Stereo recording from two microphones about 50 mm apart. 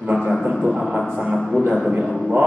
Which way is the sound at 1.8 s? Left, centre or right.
Centre.